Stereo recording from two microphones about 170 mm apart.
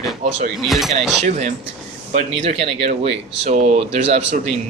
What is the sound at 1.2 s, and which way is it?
Speech, 45° right (ahead or behind).